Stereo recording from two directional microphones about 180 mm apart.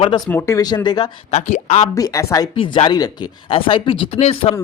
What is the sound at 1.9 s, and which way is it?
Speech, 20° left (ahead or behind).